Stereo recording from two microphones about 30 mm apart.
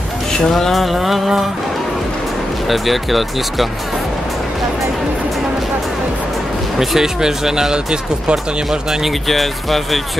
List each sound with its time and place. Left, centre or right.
0.5 s speech: centre
0.7 s speech: centre
2.7 s speech: centre
6.8 s speech: centre
7.2 s speech: centre
7.7 s speech: right
9.3 s speech: centre